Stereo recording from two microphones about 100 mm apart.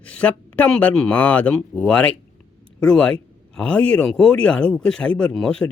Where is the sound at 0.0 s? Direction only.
10° left (ahead or behind).